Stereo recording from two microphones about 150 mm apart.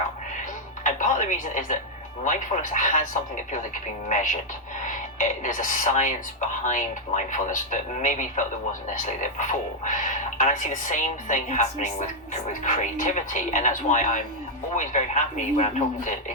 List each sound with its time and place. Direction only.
0.9 s speech: 55° left (ahead or behind)